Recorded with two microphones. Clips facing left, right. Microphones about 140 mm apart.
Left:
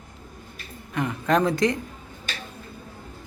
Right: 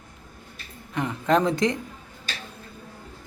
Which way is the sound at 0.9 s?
20° right (ahead or behind).